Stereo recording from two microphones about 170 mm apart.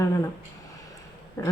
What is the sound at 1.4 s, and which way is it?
Speech, 15° left (ahead or behind).